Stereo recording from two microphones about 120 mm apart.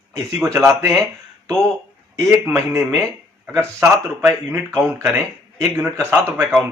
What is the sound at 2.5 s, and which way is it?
A man's voice, 25° right (ahead or behind).